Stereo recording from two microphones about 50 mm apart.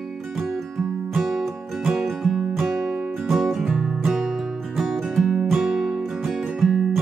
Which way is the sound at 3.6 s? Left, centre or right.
Centre.